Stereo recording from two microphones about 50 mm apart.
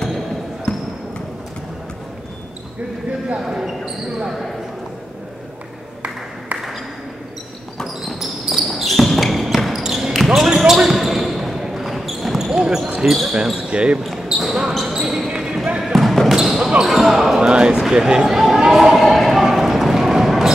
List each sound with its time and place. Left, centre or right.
3.4 s speech: centre
7.7 s basketball bounce: centre
9.8 s a sound: centre
10.1 s basketball bounce: centre
12.5 s basketball bounce: centre
13.0 s speech: centre
13.6 s speech: centre
14.4 s basketball bounce: centre
15.0 s basketball bounce: centre
15.8 s basketball bounce: centre
17.4 s speech: centre
18.7 s a sound: centre